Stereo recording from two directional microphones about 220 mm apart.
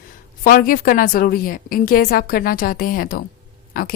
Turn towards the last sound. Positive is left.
turn(degrees=40)  # may be behind; listen again after turning